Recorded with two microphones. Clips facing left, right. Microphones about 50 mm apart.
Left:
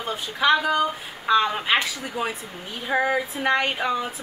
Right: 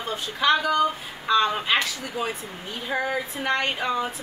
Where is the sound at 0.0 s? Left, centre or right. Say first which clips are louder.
Left 1 dB; centre.